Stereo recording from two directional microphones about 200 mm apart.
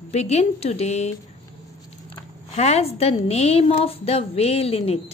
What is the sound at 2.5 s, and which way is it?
A woman's voice, 30° left (ahead or behind).